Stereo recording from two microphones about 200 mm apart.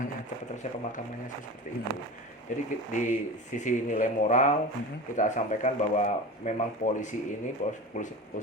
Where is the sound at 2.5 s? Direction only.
40° left (ahead or behind).